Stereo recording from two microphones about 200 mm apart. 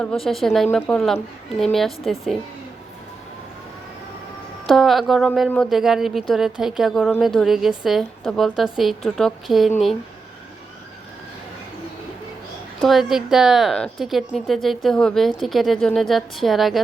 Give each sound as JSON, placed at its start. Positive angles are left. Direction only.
{"t": 0.0, "sound": "speech", "side_deg": 5}
{"t": 4.6, "sound": "speech", "side_deg": 0}
{"t": 12.8, "sound": "speech", "side_deg": 0}